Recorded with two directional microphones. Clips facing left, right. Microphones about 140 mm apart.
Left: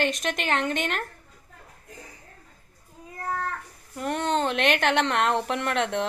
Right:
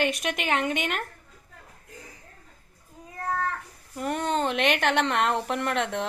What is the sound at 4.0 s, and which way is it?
Speech, 5° right (ahead or behind).